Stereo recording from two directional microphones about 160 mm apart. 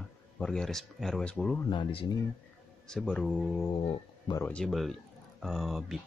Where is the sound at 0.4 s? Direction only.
5° left (ahead or behind).